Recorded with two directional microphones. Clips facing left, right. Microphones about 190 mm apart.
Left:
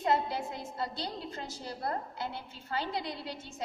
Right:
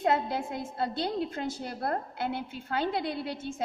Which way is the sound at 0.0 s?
55° right (ahead or behind).